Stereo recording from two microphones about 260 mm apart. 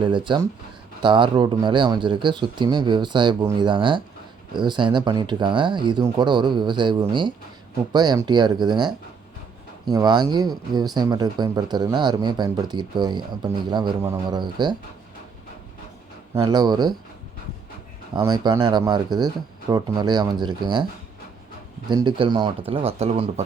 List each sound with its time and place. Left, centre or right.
0.0 s speech: centre
9.9 s speech: centre
16.3 s speech: centre
18.1 s speech: centre
21.8 s speech: centre